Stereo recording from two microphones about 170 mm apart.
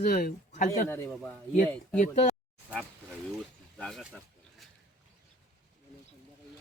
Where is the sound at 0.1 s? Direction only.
65° left (ahead or behind).